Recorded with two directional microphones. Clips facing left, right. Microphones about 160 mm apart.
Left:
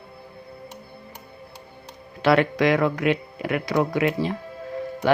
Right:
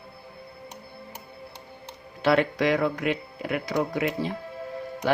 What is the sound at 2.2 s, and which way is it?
Speech, 90° left.